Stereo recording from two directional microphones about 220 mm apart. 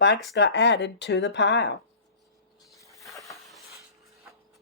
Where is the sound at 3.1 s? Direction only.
Centre (ahead or behind).